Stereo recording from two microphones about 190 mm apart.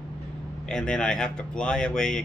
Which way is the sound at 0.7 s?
5° left (ahead or behind).